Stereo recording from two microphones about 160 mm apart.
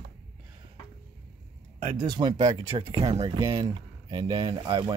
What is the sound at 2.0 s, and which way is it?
Speech, 25° right (ahead or behind).